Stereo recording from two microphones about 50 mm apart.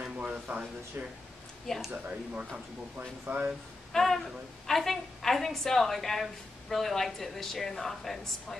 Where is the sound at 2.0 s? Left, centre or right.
Right.